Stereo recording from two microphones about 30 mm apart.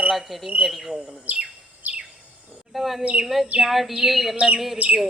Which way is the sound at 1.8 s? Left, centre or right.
Right.